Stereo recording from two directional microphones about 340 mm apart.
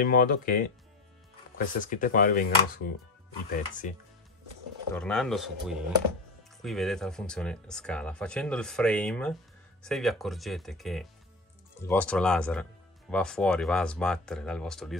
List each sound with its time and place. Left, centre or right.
0.0 s speech: left
1.8 s speech: left
4.9 s speech: centre